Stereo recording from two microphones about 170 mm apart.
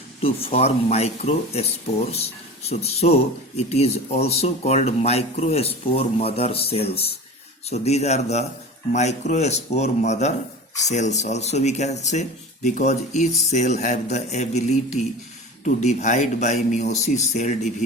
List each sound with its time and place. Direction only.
0.2 s speech: 35° left (ahead or behind)